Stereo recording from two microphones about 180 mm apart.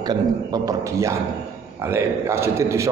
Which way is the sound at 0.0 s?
20° right (ahead or behind).